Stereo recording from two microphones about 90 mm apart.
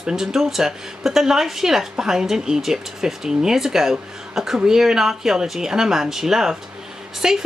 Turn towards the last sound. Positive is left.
turn(degrees=-5)  # may be behind; listen again after turning